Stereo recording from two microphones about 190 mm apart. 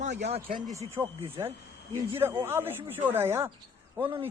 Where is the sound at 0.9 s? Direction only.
15° right (ahead or behind).